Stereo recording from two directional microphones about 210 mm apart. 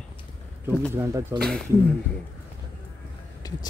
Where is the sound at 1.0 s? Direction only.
10° right (ahead or behind).